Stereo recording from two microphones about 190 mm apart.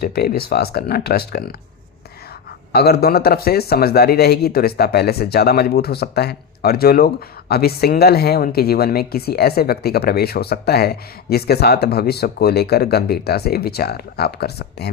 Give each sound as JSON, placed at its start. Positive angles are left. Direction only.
{"t": 0.0, "sound": "speech", "side_deg": 55}
{"t": 2.7, "sound": "speech", "side_deg": 55}